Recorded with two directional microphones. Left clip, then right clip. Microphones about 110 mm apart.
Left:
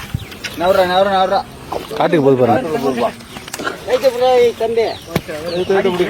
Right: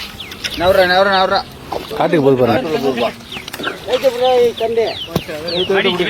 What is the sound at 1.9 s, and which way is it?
Speech, 5° left (ahead or behind).